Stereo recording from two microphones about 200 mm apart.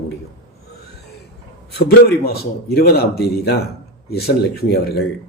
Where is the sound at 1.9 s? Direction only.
50° left (ahead or behind).